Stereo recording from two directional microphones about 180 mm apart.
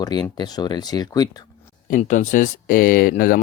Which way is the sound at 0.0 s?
25° left (ahead or behind).